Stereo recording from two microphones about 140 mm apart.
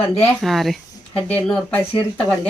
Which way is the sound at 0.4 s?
Centre (ahead or behind).